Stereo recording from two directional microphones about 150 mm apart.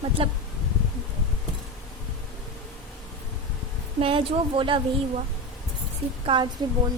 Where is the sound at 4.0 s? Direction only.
35° right (ahead or behind).